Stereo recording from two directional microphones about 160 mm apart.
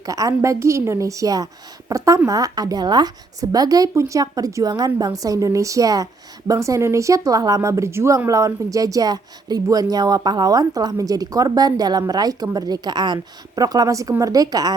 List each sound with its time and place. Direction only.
0.0 s speech: 20° right (ahead or behind)